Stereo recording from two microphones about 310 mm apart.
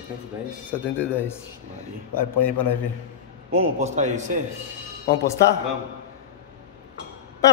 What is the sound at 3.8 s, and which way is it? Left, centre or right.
Speech, right.